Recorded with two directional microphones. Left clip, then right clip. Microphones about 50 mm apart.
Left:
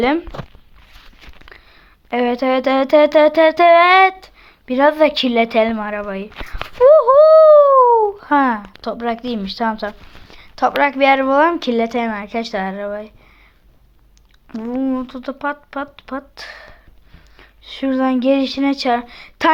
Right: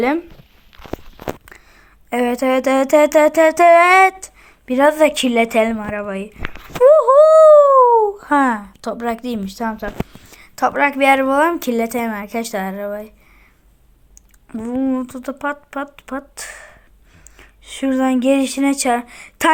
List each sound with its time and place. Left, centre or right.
2.0 s music: right
5.8 s speech: right
6.8 s a sound: centre; by 8.6 s right
8.8 s music: right
9.4 s music: right
10.1 s a sound: right
10.4 s a woman's voice: centre
10.9 s music: right
14.6 s speech: right
15.0 s speech: right
16.3 s speech: right
18.9 s music: right